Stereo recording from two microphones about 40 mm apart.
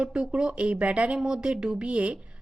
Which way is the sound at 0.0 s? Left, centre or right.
Right.